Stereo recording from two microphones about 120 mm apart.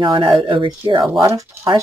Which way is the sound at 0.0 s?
45° right (ahead or behind).